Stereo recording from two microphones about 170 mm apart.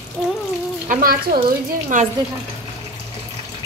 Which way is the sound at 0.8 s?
55° right (ahead or behind).